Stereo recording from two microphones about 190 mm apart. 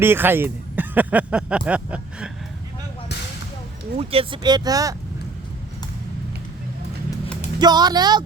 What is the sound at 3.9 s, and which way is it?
Speech, 30° right (ahead or behind).